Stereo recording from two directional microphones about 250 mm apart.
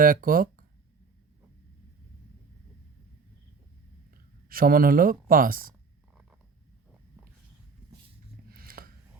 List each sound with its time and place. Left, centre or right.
0.0 s speech: right
4.4 s speech: right
8.4 s a sound: right